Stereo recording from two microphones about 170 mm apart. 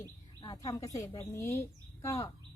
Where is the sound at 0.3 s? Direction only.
20° left (ahead or behind).